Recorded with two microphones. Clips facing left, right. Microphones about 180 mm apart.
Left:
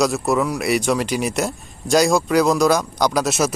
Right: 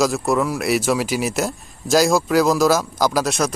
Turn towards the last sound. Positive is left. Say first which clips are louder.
# left 1 dB
turn(degrees=5)  # may be behind; listen again after turning